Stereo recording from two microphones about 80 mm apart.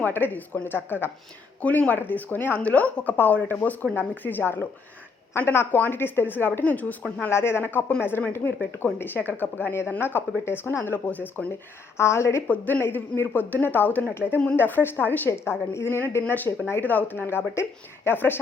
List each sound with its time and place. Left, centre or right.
0.0 s speech: left
7.2 s speech: left
12.5 s speech: centre